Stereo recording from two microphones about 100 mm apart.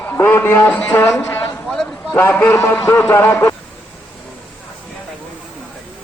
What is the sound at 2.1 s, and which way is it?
A man's voice, 20° left (ahead or behind).